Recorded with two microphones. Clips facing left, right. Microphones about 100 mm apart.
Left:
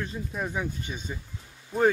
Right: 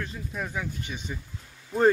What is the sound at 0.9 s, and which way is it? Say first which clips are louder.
Speech: even; 25° left (ahead or behind).